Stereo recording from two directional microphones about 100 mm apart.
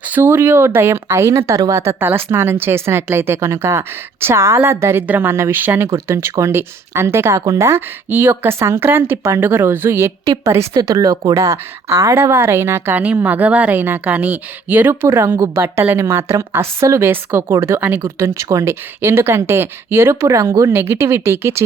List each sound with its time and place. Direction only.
0.1 s speech: 25° right (ahead or behind)
10.8 s speech: 35° right (ahead or behind)
20.7 s speech: 20° right (ahead or behind)